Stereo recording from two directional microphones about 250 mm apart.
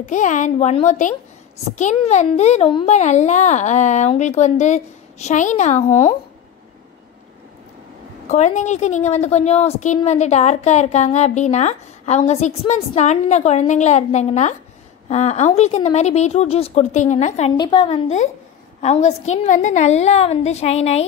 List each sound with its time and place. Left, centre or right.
0.0 s a woman's voice: left
8.3 s a woman's voice: left